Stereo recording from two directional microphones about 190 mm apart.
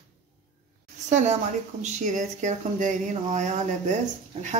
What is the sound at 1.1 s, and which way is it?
Speech, 35° right (ahead or behind).